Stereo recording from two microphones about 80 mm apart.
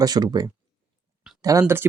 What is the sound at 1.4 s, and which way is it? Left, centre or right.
Speech, right.